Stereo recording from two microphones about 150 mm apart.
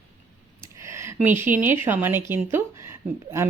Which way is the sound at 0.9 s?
15° right (ahead or behind).